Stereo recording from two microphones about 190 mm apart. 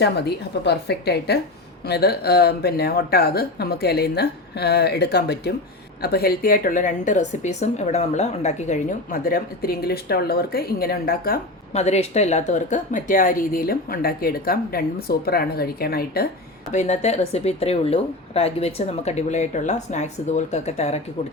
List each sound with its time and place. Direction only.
0.0 s a woman's voice: 60° left (ahead or behind)
11.7 s a woman's voice: 35° left (ahead or behind); by 16.3 s 55° left (ahead or behind)
16.7 s a woman's voice: 35° left (ahead or behind)